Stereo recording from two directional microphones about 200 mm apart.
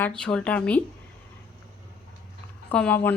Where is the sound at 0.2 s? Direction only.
5° left (ahead or behind).